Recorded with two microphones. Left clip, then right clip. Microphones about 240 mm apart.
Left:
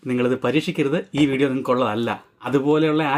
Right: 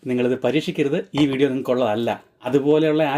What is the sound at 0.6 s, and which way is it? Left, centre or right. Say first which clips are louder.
Speech: even; centre.